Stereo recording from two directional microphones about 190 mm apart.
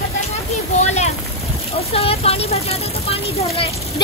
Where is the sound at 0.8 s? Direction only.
35° left (ahead or behind).